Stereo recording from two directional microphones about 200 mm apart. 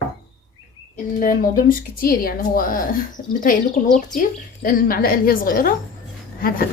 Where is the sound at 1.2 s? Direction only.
45° left (ahead or behind).